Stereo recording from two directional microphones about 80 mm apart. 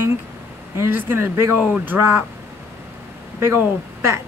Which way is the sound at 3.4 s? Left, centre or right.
Right.